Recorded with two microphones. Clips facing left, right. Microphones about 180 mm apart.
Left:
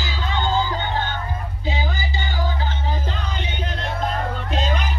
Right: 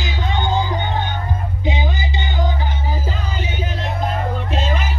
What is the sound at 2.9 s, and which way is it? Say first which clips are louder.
Music: right 2 dB; 5° right (ahead or behind).